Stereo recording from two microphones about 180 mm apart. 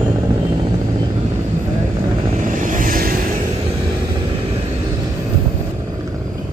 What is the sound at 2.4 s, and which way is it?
Vehicle, 45° right (ahead or behind).